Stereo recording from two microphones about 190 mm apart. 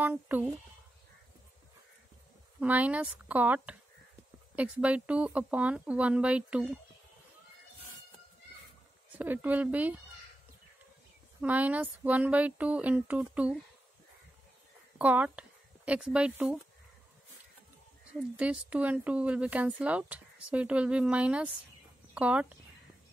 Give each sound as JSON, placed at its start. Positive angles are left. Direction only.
{"t": 0.0, "sound": "speech", "side_deg": -10}
{"t": 2.6, "sound": "speech", "side_deg": -5}
{"t": 9.2, "sound": "speech", "side_deg": -10}
{"t": 11.4, "sound": "speech", "side_deg": -10}
{"t": 15.0, "sound": "speech", "side_deg": -10}
{"t": 18.3, "sound": "speech", "side_deg": -5}